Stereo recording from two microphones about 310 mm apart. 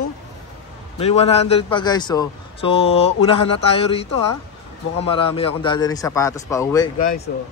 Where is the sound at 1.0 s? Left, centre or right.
Centre.